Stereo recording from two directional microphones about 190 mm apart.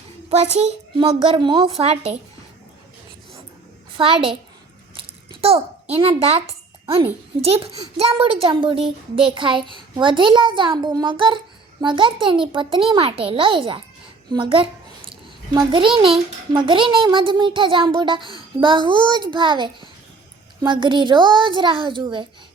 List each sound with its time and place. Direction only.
0.3 s a child's voice: 35° right (ahead or behind)
3.9 s a child's voice: 30° right (ahead or behind)
4.9 s a sound: 30° right (ahead or behind)
7.5 s a child's voice: 30° right (ahead or behind)
14.3 s a sound: 25° right (ahead or behind)
15.5 s a child's voice: 25° right (ahead or behind)